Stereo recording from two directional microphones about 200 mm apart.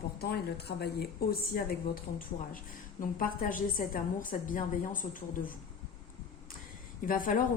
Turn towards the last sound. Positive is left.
turn(degrees=45)  # may be behind; listen again after turning